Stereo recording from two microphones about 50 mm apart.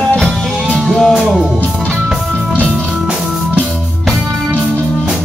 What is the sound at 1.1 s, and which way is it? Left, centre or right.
Music, centre.